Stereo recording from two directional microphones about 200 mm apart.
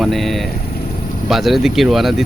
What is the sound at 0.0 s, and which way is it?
Speech, centre (ahead or behind).